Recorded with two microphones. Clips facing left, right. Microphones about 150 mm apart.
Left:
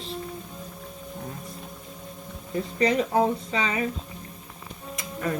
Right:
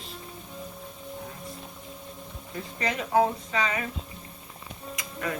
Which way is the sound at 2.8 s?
35° left (ahead or behind).